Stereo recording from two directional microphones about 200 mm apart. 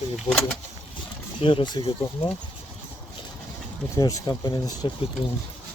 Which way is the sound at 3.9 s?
20° left (ahead or behind).